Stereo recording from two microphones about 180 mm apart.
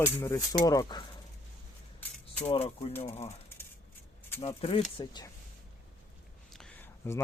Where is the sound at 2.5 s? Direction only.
35° left (ahead or behind).